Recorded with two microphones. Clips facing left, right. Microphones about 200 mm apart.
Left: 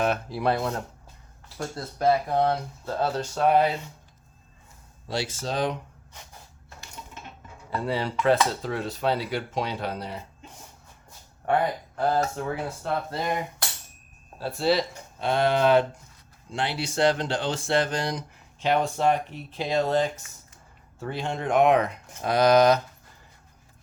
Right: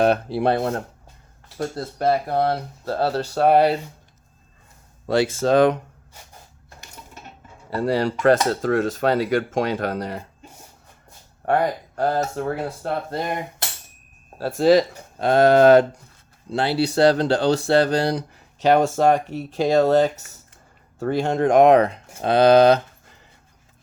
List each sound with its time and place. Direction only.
0.0 s speech: 30° right (ahead or behind)
0.6 s speech: 50° right (ahead or behind)
2.1 s speech: 35° right (ahead or behind)
3.4 s speech: 70° right (ahead or behind)
5.0 s speech: 55° right (ahead or behind)
6.8 s a sound: 45° right (ahead or behind)
7.9 s speech: 40° right (ahead or behind)
11.4 s speech: 40° right (ahead or behind)